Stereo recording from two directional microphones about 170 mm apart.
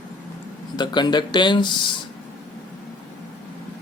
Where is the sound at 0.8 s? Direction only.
25° left (ahead or behind).